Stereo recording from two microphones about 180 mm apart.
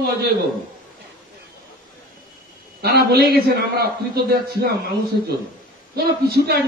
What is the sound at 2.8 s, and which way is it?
A man's voice, 60° right (ahead or behind).